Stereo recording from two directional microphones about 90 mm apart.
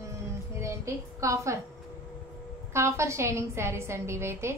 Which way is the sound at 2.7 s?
30° right (ahead or behind).